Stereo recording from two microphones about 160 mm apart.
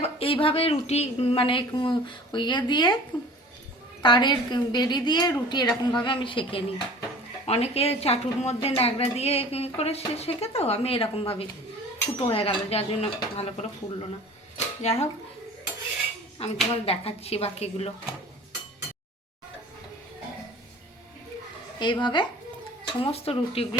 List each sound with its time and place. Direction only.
0.0 s speech: 35° left (ahead or behind)
4.0 s a woman's voice: 30° left (ahead or behind)
16.4 s speech: 40° left (ahead or behind)
21.8 s a woman's voice: 30° left (ahead or behind)